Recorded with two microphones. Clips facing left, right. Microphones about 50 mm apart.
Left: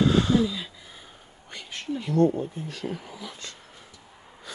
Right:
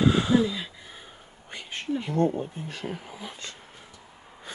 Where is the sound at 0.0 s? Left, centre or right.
Centre.